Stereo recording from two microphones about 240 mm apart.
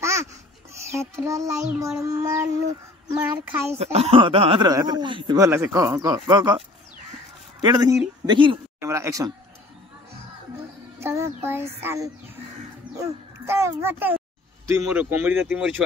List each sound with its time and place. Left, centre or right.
0.9 s speech: centre
3.7 s speech: right
7.6 s a woman's voice: centre
11.0 s speech: centre